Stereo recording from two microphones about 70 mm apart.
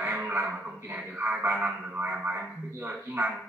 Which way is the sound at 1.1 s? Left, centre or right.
Right.